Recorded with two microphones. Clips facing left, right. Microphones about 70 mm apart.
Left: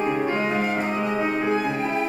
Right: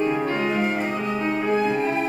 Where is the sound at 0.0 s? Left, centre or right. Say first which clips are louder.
Even; left.